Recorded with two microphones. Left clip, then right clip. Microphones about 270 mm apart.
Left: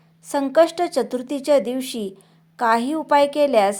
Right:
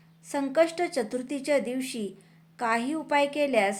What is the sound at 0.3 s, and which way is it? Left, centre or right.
A woman's voice, left.